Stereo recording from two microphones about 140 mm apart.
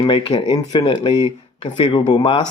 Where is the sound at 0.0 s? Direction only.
35° left (ahead or behind).